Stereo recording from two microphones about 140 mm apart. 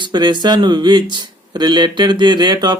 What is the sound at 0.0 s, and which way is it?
Speech, 35° right (ahead or behind).